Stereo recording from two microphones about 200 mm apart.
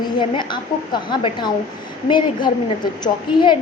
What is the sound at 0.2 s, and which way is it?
A woman's voice, 25° left (ahead or behind).